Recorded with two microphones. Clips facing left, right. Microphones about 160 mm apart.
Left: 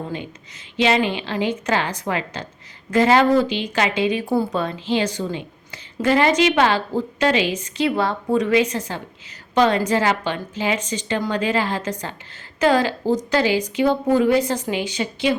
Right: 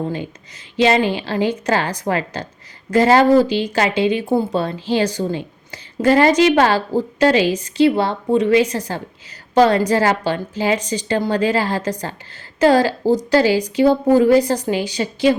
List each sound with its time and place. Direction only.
0.8 s a woman's voice: 40° right (ahead or behind)
4.6 s a woman's voice: 40° right (ahead or behind)